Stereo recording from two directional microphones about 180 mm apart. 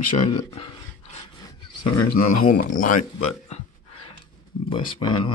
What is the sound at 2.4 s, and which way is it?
Speech, 45° left (ahead or behind).